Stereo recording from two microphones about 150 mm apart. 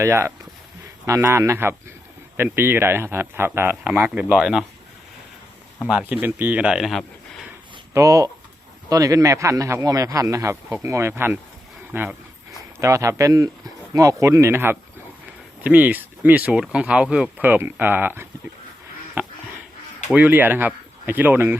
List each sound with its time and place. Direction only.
0.0 s speech: 15° right (ahead or behind)
5.9 s speech: 10° right (ahead or behind)
7.9 s speech: 20° right (ahead or behind)
12.8 s speech: 20° right (ahead or behind)
19.2 s a sound: 10° right (ahead or behind)
20.1 s speech: 10° right (ahead or behind)